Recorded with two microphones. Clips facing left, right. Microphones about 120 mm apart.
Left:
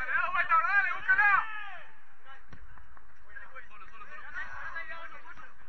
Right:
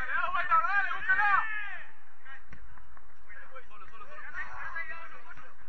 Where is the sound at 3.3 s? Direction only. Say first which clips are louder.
Left 2 dB; 15° left (ahead or behind).